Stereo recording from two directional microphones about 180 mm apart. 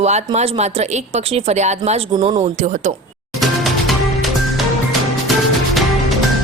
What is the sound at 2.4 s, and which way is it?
Speech, 40° right (ahead or behind).